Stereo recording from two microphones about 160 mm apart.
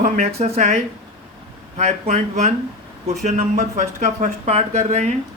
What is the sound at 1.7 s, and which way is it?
Speech, 45° right (ahead or behind).